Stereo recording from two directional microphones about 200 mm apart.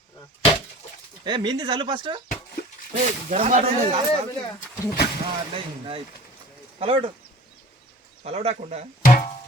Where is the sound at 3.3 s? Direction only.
35° right (ahead or behind).